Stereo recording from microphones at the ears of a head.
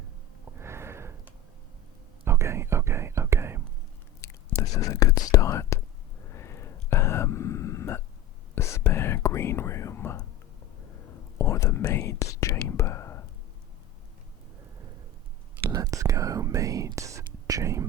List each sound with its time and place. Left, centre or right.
2.2 s whispering: right
4.2 s whispering: left
6.2 s a sound: left
8.5 s whispering: left
15.5 s whispering: right